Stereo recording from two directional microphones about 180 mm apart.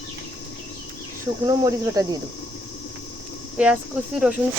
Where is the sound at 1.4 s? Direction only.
20° right (ahead or behind).